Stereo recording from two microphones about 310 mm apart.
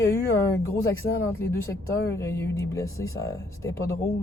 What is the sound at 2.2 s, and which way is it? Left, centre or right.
Speech, centre.